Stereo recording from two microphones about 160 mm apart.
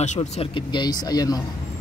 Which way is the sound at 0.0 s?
45° left (ahead or behind).